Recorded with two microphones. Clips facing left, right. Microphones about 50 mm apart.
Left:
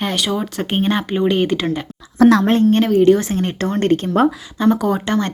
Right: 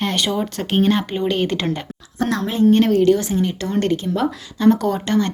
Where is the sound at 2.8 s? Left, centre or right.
Centre.